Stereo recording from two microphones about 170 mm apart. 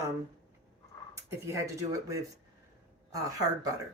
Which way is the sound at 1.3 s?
15° right (ahead or behind).